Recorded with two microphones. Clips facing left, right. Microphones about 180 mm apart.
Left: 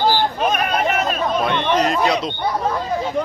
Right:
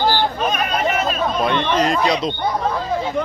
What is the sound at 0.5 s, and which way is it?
Chatter, 55° left (ahead or behind).